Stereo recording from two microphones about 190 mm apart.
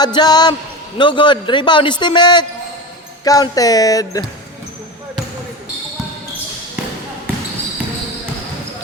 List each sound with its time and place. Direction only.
0.0 s a man's voice: 20° left (ahead or behind)